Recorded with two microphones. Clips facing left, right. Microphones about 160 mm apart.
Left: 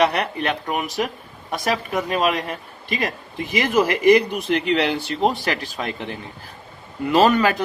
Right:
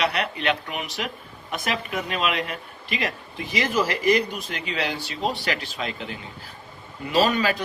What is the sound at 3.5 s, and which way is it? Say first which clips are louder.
Speech: left 5 dB; 50° left (ahead or behind).